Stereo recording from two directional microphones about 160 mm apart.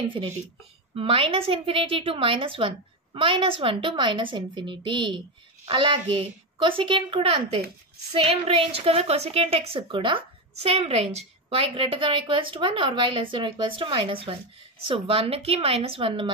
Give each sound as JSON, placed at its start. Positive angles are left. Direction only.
{"t": 0.0, "sound": "a woman's voice", "side_deg": -30}